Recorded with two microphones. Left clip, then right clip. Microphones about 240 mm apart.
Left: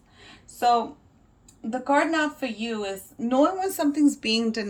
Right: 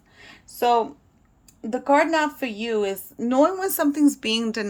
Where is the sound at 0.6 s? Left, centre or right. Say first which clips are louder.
Right 2 dB; right.